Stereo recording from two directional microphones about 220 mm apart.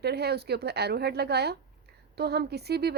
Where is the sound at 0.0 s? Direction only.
45° right (ahead or behind).